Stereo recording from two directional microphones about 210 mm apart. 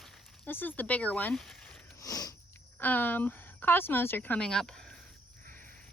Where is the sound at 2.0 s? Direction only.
15° left (ahead or behind).